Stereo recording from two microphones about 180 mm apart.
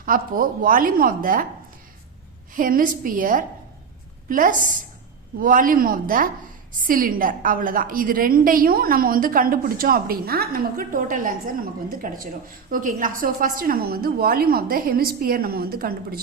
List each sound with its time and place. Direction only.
0.0 s a woman's voice: 50° right (ahead or behind)
2.6 s a woman's voice: 50° right (ahead or behind)